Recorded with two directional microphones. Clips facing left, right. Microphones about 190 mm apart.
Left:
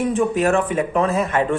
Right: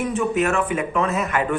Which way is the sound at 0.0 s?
35° left (ahead or behind).